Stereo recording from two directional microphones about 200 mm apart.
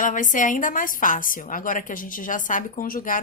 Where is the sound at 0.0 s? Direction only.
40° left (ahead or behind).